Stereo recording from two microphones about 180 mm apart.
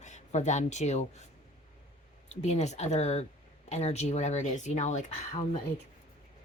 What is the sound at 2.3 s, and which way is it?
Speech, 40° left (ahead or behind).